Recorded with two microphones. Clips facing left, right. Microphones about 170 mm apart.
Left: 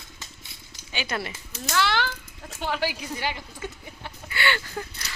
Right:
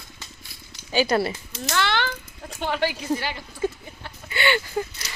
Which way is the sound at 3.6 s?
35° right (ahead or behind).